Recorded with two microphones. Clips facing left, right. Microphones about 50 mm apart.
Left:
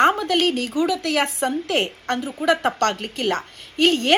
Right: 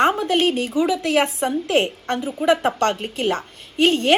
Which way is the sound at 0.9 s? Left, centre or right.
Right.